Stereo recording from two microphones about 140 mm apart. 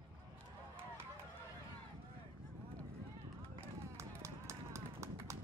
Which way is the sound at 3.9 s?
20° right (ahead or behind).